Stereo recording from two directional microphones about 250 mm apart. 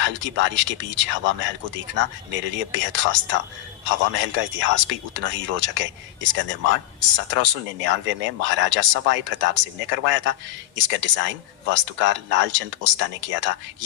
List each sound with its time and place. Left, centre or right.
0.0 s speech: right